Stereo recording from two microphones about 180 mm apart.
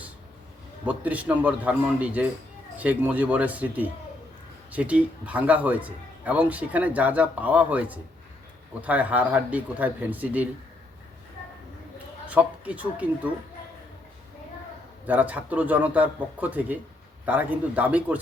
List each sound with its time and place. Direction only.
0.9 s a man's voice: 10° right (ahead or behind)
12.3 s a man's voice: 10° right (ahead or behind)
15.0 s a man's voice: 10° right (ahead or behind)